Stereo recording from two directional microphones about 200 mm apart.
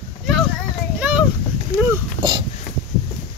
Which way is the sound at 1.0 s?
5° right (ahead or behind).